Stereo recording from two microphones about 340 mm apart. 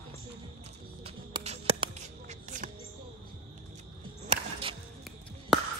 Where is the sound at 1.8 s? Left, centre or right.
Centre.